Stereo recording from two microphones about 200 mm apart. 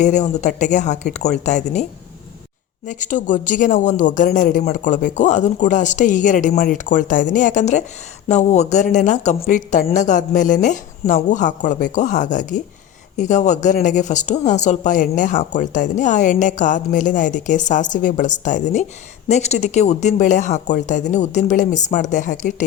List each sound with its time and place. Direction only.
0.0 s speech: 35° left (ahead or behind)